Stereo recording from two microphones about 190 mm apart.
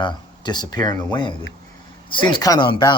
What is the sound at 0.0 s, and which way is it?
Speech, 20° left (ahead or behind).